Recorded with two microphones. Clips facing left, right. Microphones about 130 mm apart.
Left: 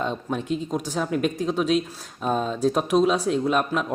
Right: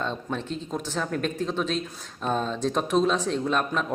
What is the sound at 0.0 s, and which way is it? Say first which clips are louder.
Speech: left 3 dB; 10° left (ahead or behind).